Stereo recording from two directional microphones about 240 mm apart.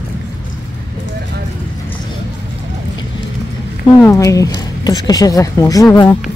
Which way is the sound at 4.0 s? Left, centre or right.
Centre.